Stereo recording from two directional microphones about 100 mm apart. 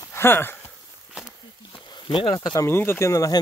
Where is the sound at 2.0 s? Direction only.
55° left (ahead or behind).